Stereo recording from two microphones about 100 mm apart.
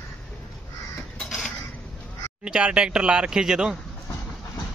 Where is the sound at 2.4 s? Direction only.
10° right (ahead or behind).